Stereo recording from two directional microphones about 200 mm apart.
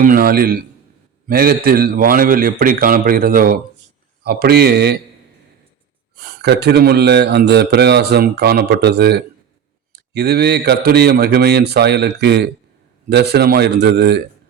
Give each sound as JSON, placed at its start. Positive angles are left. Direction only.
{"t": 0.0, "sound": "a man's voice", "side_deg": -45}
{"t": 6.1, "sound": "a man's voice", "side_deg": -55}